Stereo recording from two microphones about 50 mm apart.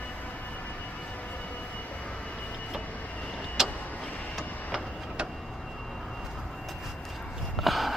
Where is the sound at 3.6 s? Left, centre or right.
Centre.